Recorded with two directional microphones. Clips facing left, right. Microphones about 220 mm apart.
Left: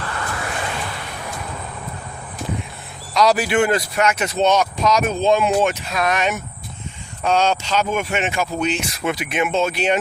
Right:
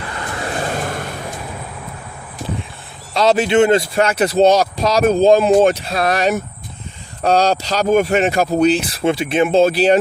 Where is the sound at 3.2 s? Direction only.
25° right (ahead or behind).